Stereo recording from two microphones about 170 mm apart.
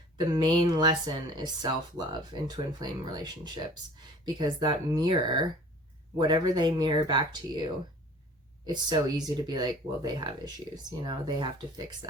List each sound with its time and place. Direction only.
0.3 s speech: 25° right (ahead or behind)